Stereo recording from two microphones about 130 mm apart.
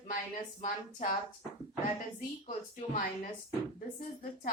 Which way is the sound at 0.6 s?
75° left (ahead or behind).